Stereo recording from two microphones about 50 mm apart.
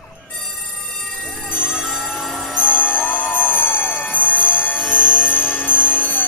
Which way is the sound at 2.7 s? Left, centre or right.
Left.